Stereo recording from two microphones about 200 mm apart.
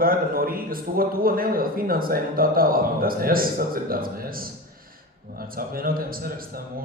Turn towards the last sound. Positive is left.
turn(degrees=-45)  # may be behind; listen again after turning